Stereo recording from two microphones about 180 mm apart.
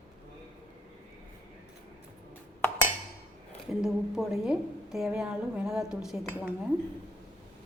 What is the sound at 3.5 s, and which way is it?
A woman's voice, centre (ahead or behind).